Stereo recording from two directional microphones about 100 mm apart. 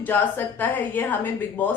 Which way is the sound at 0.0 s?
20° left (ahead or behind).